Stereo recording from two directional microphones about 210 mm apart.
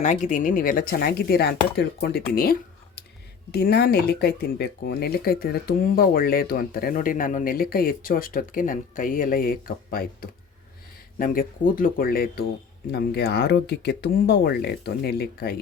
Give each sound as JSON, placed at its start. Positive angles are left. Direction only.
{"t": 0.0, "sound": "speech", "side_deg": 35}